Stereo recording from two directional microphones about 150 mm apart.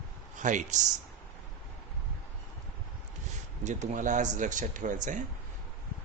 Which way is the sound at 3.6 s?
55° right (ahead or behind).